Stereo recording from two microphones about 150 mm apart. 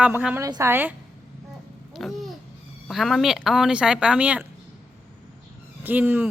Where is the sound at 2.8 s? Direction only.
Centre (ahead or behind).